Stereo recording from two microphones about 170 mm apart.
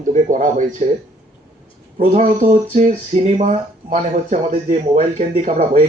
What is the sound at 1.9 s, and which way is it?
Speech, 45° right (ahead or behind).